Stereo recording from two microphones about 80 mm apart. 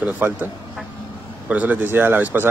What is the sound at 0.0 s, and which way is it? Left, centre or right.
Speech, right.